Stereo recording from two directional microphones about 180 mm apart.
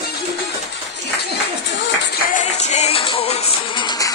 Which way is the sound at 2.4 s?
40° left (ahead or behind).